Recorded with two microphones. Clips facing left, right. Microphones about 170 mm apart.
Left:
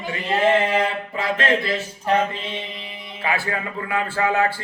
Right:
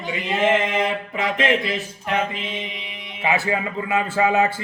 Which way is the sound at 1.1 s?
15° right (ahead or behind).